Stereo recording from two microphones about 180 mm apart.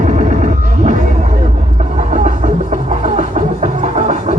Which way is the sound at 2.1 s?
45° right (ahead or behind).